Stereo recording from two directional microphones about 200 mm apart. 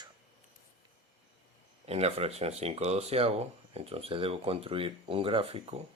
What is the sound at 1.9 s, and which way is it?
Speech, 30° right (ahead or behind).